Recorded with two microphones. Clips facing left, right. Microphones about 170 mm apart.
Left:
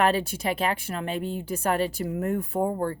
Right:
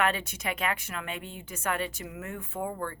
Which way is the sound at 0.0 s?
35° left (ahead or behind).